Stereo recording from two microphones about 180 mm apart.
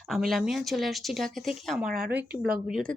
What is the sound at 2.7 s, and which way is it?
Speech, 5° left (ahead or behind).